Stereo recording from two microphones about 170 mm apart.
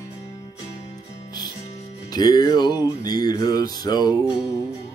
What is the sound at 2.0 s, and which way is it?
Music, 25° left (ahead or behind).